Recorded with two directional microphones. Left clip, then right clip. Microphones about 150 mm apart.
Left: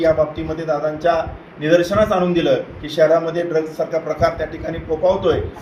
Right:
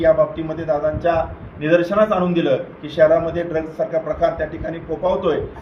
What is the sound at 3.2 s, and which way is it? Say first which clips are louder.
Speech: left 1 dB; 20° right (ahead or behind).